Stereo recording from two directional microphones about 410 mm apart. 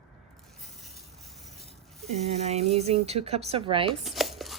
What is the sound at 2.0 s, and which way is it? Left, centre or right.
Speech, centre.